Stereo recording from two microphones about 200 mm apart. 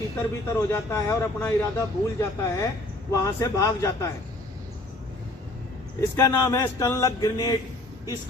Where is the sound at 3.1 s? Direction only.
15° left (ahead or behind).